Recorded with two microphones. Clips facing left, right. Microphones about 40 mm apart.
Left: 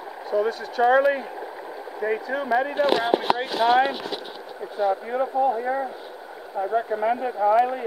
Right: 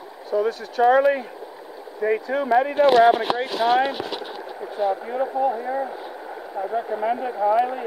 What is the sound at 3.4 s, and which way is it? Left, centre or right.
Speech, centre.